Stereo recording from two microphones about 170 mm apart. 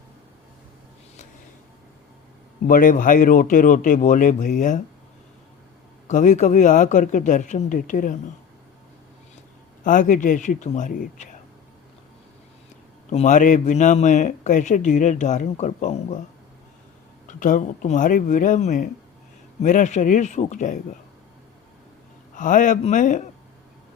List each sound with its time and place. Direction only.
2.6 s speech: 55° left (ahead or behind)
6.1 s speech: 45° left (ahead or behind)
9.8 s speech: 50° left (ahead or behind)
13.1 s speech: 45° left (ahead or behind)
17.2 s speech: 50° left (ahead or behind)
22.4 s speech: 50° left (ahead or behind)